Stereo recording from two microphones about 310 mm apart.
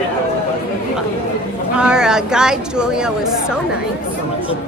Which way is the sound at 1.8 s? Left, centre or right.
Centre.